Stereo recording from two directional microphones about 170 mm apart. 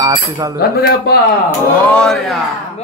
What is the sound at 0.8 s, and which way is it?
Speech, 65° left (ahead or behind).